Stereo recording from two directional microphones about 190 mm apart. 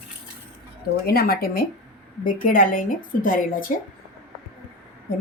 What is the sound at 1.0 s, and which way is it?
A woman's voice, 55° left (ahead or behind).